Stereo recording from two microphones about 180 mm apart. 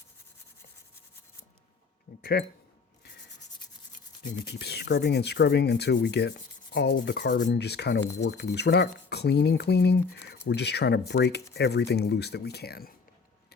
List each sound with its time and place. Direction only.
2.3 s speech: 65° left (ahead or behind)
4.6 s rub: 65° left (ahead or behind)